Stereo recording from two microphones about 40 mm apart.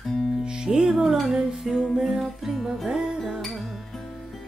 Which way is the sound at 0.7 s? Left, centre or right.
Centre.